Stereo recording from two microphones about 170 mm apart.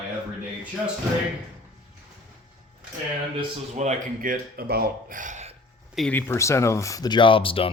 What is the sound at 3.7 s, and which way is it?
Speech, 45° right (ahead or behind).